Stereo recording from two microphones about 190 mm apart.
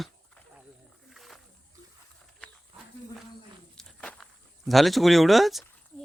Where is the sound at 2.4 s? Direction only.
5° left (ahead or behind).